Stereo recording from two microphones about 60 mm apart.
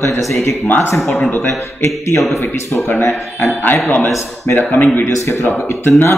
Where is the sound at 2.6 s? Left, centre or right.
Left.